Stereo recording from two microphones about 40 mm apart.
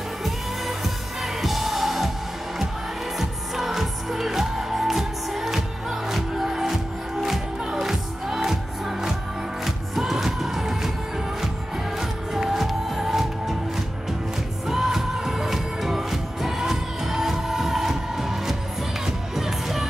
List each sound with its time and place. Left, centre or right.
0.2 s music: centre
3.2 s music: centre
12.0 s music: centre
14.7 s music: centre